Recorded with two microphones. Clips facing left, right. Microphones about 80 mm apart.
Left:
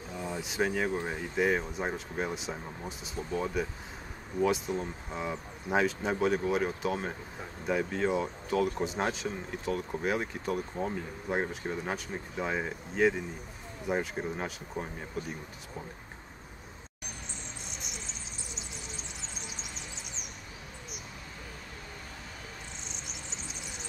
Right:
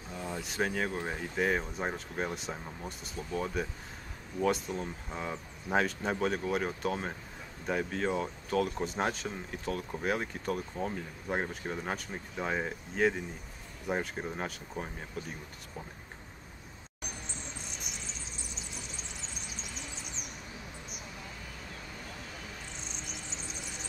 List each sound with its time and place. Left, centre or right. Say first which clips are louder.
0.3 s speech: left 2 dB; centre
19.6 s music: even; left
23.0 s a sound: right 1 dB; left